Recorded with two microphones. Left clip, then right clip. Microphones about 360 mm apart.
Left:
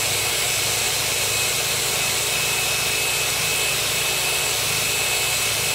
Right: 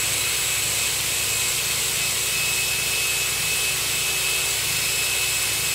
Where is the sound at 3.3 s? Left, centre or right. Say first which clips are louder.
Left 2 dB; centre.